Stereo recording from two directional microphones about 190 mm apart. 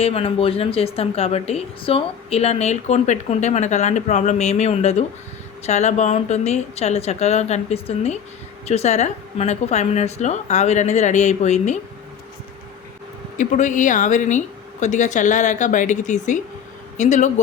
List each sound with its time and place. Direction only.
0.0 s a woman's voice: 30° left (ahead or behind)
13.3 s a woman's voice: 40° left (ahead or behind)